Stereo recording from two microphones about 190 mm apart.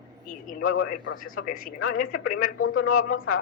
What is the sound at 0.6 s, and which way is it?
Speech, 90° left.